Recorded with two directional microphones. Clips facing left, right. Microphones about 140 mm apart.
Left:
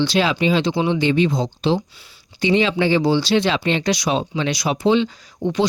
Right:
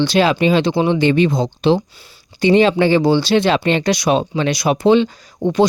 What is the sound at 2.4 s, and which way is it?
Speech, 50° right (ahead or behind).